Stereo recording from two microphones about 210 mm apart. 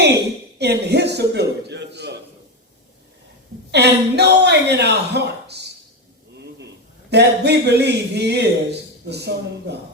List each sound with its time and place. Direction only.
0.6 s speech: 50° right (ahead or behind)
3.7 s speech: 55° right (ahead or behind)
7.1 s speech: 50° right (ahead or behind)